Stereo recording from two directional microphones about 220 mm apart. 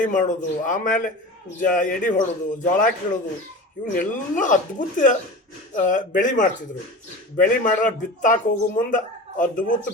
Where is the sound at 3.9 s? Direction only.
35° left (ahead or behind).